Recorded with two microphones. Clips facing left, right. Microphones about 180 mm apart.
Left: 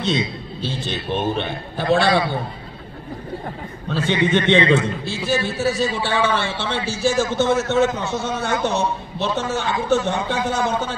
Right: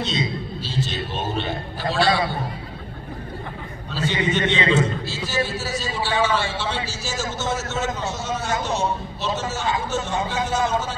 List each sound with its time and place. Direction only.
0.0 s a man's voice: 55° left (ahead or behind)
3.9 s a man's voice: 55° left (ahead or behind)